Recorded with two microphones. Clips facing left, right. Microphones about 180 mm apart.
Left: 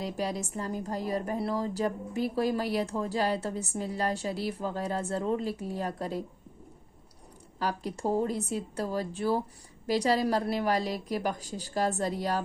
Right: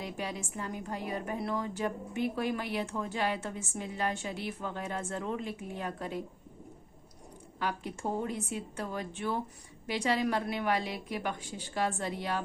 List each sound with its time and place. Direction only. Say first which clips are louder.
0.0 s a woman's voice: left 5 dB; 35° left (ahead or behind)
7.6 s a woman's voice: left 4 dB; 35° left (ahead or behind)